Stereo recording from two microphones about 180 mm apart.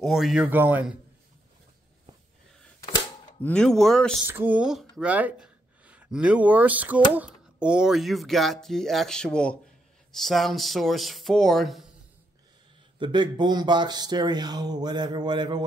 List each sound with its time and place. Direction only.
0.0 s speech: centre (ahead or behind)
3.3 s speech: 5° left (ahead or behind)
4.3 s speech: 10° right (ahead or behind)
13.0 s speech: 25° right (ahead or behind)